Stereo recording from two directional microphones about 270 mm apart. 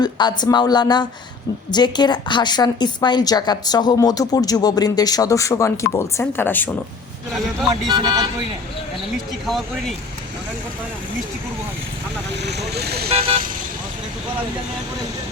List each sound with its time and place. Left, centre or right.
0.0 s a woman's voice: centre
7.9 s speech: centre
9.5 s speech: centre
12.5 s speech: right
13.1 s vehicle: centre